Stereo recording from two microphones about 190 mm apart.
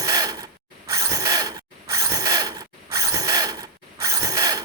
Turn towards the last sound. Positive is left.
turn(degrees=-20)  # may be behind; listen again after turning